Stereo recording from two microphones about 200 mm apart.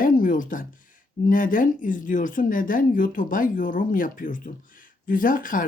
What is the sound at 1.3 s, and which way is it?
Speech, 40° left (ahead or behind).